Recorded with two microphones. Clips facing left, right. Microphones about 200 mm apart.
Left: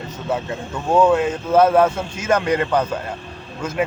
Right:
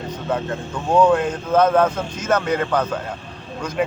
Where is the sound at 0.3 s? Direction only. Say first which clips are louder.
Even; 5° left (ahead or behind).